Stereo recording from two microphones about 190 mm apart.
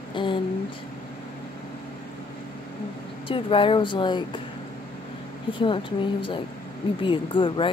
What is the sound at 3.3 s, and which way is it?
Speech, 30° left (ahead or behind).